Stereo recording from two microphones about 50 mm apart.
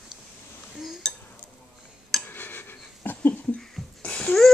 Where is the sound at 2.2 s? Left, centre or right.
Left.